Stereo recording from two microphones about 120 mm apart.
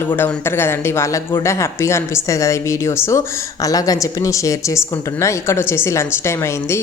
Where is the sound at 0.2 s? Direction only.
20° left (ahead or behind).